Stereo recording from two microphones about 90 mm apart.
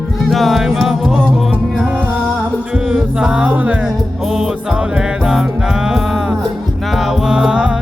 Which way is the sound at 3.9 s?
Centre (ahead or behind).